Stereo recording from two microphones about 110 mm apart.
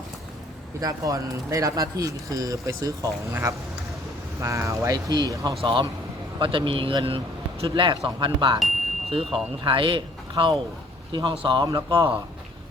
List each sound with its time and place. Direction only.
0.8 s speech: 35° right (ahead or behind)
4.4 s speech: 25° right (ahead or behind)
5.6 s speech: 50° right (ahead or behind)